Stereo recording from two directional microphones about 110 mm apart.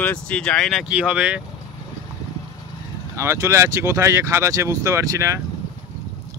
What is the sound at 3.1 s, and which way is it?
Speech, 25° right (ahead or behind).